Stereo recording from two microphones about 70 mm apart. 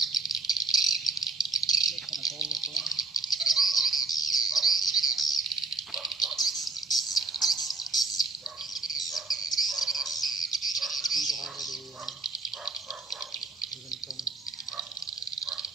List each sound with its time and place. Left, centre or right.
0.0 s rattle: centre
1.6 s rattle: left
1.9 s rattle: centre
3.3 s cricket: centre
4.3 s bird: centre